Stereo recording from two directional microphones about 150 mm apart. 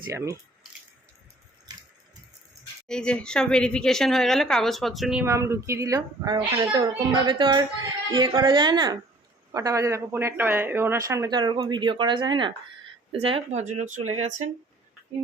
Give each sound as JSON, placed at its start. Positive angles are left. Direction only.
{"t": 0.1, "sound": "speech", "side_deg": -20}
{"t": 1.7, "sound": "water", "side_deg": -25}
{"t": 2.8, "sound": "speech", "side_deg": 5}
{"t": 5.2, "sound": "speech", "side_deg": -20}